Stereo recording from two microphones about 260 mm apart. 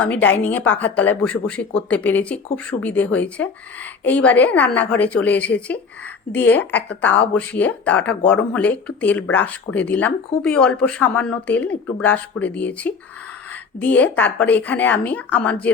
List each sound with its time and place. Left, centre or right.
0.0 s a woman's voice: centre